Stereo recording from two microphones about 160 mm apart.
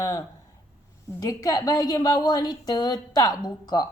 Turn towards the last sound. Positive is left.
turn(degrees=25)  # may be behind; listen again after turning